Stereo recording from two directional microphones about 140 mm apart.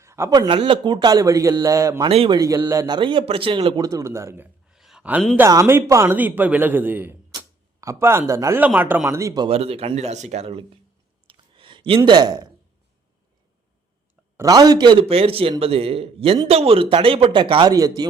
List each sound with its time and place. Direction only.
0.0 s a man's voice: 20° right (ahead or behind)
2.0 s speech: 40° right (ahead or behind)
2.4 s speech: 25° right (ahead or behind)
3.8 s a man's voice: 20° right (ahead or behind)
4.7 s a sound: 5° right (ahead or behind)
5.4 s a man's voice: 20° right (ahead or behind)
7.3 s a sound: 20° right (ahead or behind)
8.3 s a man's voice: 20° right (ahead or behind)
9.5 s speech: 45° right (ahead or behind)
11.3 s a sound: 35° right (ahead or behind)
12.0 s a man's voice: 30° right (ahead or behind)
14.3 s a man's voice: 25° right (ahead or behind)
15.0 s speech: 45° right (ahead or behind); by 18.0 s 25° right (ahead or behind)